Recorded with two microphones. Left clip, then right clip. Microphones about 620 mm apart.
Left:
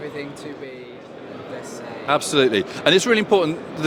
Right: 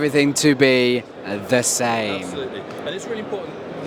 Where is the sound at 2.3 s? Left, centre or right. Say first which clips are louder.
Left 10 dB; left.